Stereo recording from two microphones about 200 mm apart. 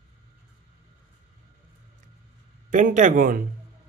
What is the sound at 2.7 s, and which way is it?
Speech, 40° right (ahead or behind).